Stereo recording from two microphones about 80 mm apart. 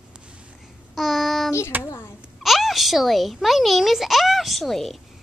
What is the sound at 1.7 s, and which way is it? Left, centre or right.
Speech, right.